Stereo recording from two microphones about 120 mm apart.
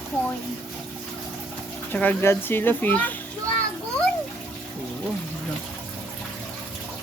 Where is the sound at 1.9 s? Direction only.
15° left (ahead or behind).